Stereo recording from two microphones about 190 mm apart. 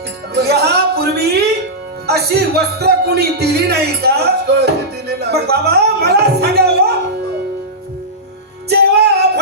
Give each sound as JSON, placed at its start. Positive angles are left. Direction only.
{"t": 0.3, "sound": "speech", "side_deg": -60}
{"t": 8.7, "sound": "music", "side_deg": -60}